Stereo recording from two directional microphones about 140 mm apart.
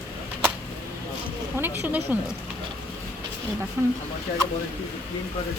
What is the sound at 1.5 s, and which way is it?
Speech, 15° right (ahead or behind).